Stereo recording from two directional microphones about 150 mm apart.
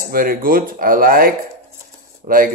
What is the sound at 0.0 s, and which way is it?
Speech, 75° right (ahead or behind).